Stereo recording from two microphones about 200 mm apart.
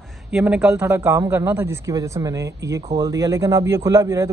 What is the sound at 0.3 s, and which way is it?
A man's voice, 5° right (ahead or behind).